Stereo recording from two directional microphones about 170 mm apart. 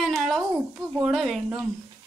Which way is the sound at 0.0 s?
Centre (ahead or behind).